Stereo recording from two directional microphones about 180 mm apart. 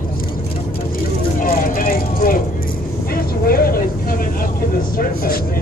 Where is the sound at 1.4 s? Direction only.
50° left (ahead or behind).